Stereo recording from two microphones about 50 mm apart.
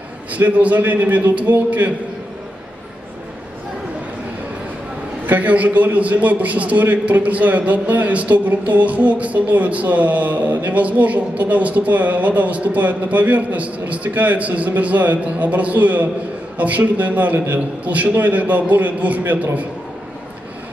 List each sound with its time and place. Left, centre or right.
0.3 s a man's voice: right
5.2 s a man's voice: right